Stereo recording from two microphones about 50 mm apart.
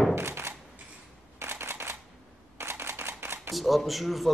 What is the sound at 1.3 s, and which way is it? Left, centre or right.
Shuffling cards, right.